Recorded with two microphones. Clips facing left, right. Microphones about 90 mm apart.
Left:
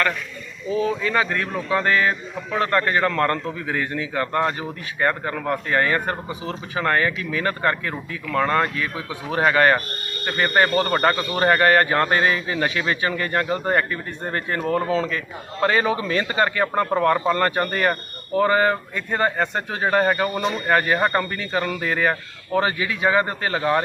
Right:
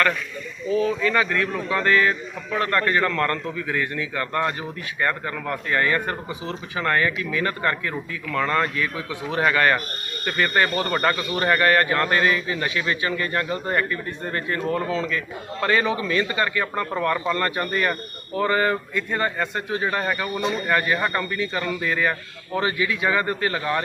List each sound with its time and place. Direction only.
0.7 s speech: 30° left (ahead or behind)
15.6 s speech: 25° left (ahead or behind)
15.9 s speech: 40° left (ahead or behind)
17.6 s speech: 45° left (ahead or behind)
18.4 s speech: 30° left (ahead or behind)